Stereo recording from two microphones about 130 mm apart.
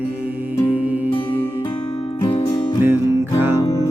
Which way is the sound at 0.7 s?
10° right (ahead or behind).